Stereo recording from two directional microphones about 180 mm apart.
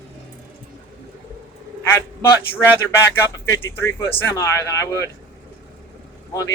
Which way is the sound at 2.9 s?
10° left (ahead or behind).